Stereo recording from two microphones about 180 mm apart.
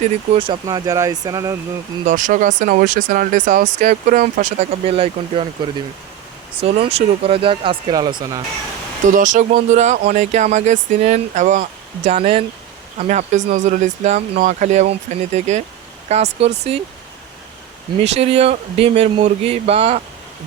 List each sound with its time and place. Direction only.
0.0 s speech: 30° right (ahead or behind)
2.0 s speech: 45° right (ahead or behind)
6.6 s speech: 30° right (ahead or behind)
9.1 s speech: 45° right (ahead or behind)
18.0 s speech: 35° right (ahead or behind)